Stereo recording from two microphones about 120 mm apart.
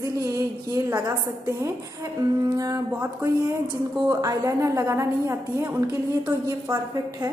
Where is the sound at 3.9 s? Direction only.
30° right (ahead or behind).